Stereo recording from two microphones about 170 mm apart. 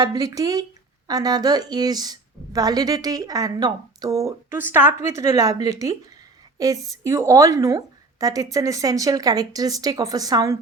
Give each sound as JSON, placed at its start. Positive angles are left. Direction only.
{"t": 0.0, "sound": "a woman's voice", "side_deg": -20}